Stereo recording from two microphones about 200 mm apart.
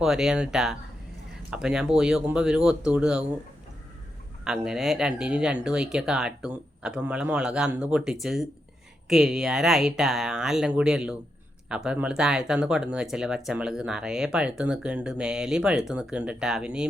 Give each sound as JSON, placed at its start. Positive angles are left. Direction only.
{"t": 0.0, "sound": "speech", "side_deg": 0}
{"t": 4.4, "sound": "speech", "side_deg": -5}